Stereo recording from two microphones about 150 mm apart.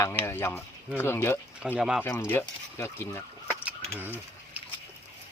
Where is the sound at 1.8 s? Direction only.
5° right (ahead or behind).